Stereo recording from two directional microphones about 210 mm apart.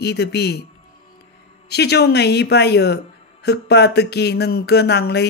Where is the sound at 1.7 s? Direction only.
50° left (ahead or behind).